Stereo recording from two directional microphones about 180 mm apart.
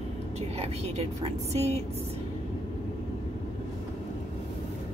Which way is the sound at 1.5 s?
35° right (ahead or behind).